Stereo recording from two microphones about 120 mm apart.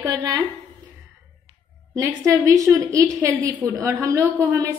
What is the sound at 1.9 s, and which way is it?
A woman's voice, 20° right (ahead or behind).